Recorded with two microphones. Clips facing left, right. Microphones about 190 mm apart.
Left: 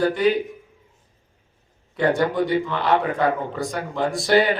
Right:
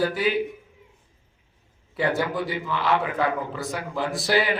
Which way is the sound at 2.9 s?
40° left (ahead or behind).